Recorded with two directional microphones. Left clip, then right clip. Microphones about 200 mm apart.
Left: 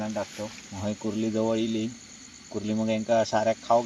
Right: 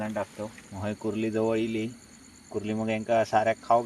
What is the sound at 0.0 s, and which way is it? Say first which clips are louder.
Speech: even; 5° left (ahead or behind).